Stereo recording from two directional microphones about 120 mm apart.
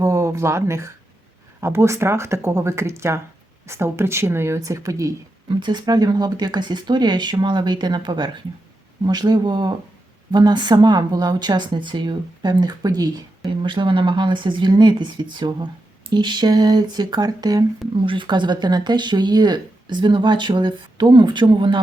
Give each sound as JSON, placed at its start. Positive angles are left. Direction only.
{"t": 0.0, "sound": "a sound", "side_deg": -25}
{"t": 1.6, "sound": "a woman's voice", "side_deg": -25}
{"t": 5.5, "sound": "speech", "side_deg": -40}
{"t": 18.0, "sound": "speech", "side_deg": -45}